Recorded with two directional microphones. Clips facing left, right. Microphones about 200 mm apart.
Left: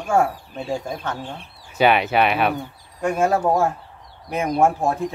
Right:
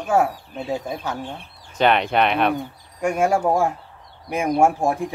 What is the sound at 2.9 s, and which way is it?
Speech, 15° right (ahead or behind).